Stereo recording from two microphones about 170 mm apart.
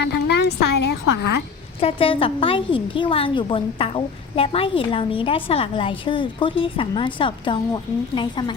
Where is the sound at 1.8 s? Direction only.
35° left (ahead or behind).